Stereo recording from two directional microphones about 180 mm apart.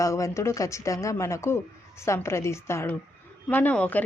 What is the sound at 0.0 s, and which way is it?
A woman's voice, 15° left (ahead or behind).